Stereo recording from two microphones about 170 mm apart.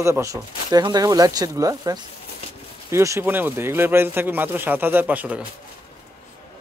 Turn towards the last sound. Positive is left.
turn(degrees=-10)  # may be behind; listen again after turning